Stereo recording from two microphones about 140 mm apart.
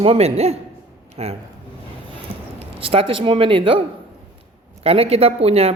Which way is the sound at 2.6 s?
40° right (ahead or behind).